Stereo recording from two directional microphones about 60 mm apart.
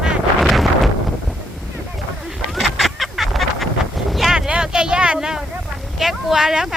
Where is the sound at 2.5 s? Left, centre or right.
Centre.